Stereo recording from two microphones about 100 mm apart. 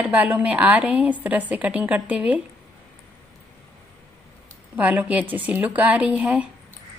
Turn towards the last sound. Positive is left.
turn(degrees=-15)  # may be behind; listen again after turning